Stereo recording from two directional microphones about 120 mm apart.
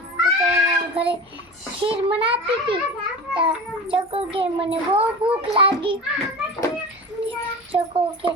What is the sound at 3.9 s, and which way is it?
A child's voice, 50° right (ahead or behind).